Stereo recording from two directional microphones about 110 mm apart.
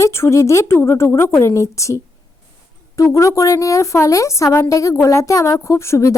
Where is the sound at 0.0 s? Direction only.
25° left (ahead or behind).